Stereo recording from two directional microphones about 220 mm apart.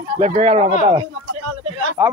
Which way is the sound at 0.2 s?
30° right (ahead or behind).